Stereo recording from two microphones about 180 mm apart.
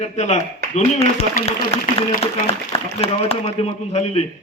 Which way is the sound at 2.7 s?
30° left (ahead or behind).